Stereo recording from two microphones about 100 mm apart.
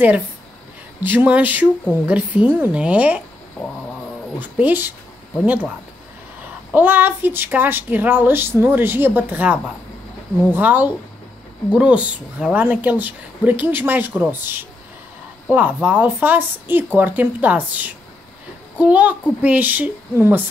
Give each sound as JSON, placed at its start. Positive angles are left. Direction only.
{"t": 1.0, "sound": "a woman's voice", "side_deg": -15}
{"t": 4.4, "sound": "a woman's voice", "side_deg": -15}
{"t": 6.7, "sound": "a woman's voice", "side_deg": -20}